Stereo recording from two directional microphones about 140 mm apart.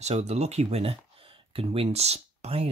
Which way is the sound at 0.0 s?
50° right (ahead or behind).